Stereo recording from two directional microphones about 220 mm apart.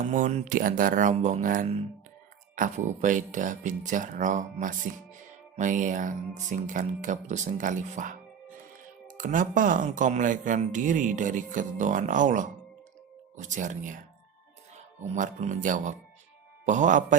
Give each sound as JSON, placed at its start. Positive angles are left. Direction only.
{"t": 0.0, "sound": "speech", "side_deg": -35}
{"t": 15.0, "sound": "speech", "side_deg": -35}